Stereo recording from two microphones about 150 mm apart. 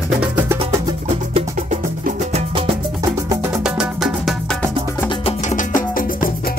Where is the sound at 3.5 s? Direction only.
5° right (ahead or behind).